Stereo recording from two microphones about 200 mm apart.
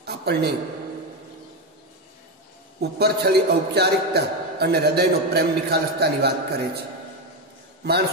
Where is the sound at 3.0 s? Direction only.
55° right (ahead or behind).